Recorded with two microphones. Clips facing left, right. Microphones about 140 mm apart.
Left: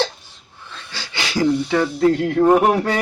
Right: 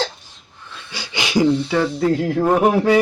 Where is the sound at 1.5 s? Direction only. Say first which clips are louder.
Even; 10° left (ahead or behind).